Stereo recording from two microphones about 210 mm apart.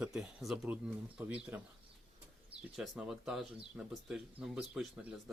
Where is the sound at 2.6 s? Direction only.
5° right (ahead or behind).